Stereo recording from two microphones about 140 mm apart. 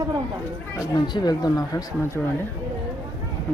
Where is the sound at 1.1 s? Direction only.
30° left (ahead or behind).